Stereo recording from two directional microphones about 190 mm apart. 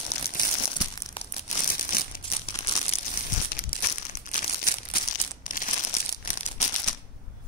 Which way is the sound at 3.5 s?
45° left (ahead or behind).